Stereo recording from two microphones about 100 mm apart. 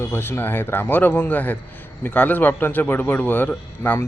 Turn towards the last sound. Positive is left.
turn(degrees=15)  # may be behind; listen again after turning